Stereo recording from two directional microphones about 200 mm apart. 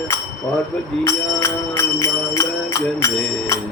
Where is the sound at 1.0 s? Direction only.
15° left (ahead or behind).